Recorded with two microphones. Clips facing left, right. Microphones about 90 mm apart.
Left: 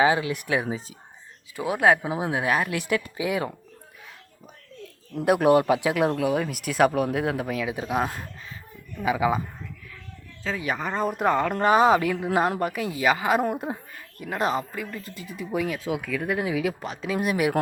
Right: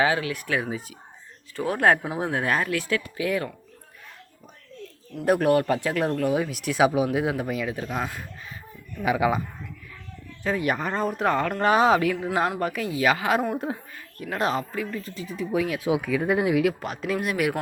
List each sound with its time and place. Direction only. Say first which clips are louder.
0.0 s speech: left 2 dB; 20° left (ahead or behind)
1.5 s speech: even; 10° left (ahead or behind)
5.2 s speech: left 2 dB; 5° left (ahead or behind)
7.7 s speech: left 3 dB; 10° left (ahead or behind)
10.4 s speech: right 4 dB; 10° right (ahead or behind)
10.8 s speech: even; centre (ahead or behind)
15.8 s speech: right 4 dB; 15° right (ahead or behind)
16.4 s speech: right 4 dB; 5° right (ahead or behind)